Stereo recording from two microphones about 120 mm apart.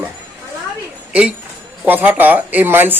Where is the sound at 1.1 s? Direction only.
10° right (ahead or behind).